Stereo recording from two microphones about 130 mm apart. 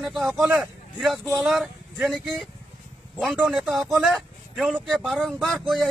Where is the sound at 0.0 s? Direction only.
Centre (ahead or behind).